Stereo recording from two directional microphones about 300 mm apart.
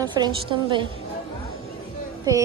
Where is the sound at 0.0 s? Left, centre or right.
Centre.